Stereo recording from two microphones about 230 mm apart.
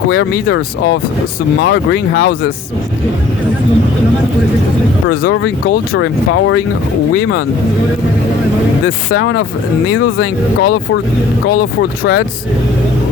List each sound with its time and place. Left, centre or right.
0.1 s speech: left
5.3 s speech: left
9.1 s speech: left
11.8 s speech: left